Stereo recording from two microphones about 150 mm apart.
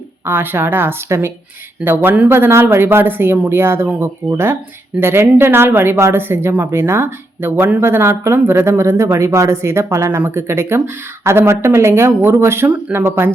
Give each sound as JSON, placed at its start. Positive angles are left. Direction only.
{"t": 0.3, "sound": "speech", "side_deg": -15}